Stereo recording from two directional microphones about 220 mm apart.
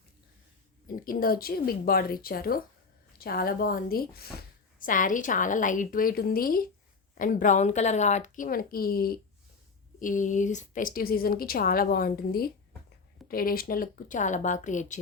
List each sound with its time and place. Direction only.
0.9 s a woman's voice: 40° left (ahead or behind)